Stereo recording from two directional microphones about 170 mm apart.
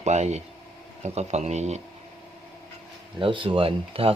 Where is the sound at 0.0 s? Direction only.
40° right (ahead or behind).